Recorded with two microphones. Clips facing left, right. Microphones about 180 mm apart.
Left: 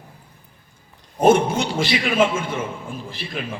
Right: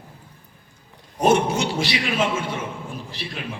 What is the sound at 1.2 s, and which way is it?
A man's voice, 55° left (ahead or behind).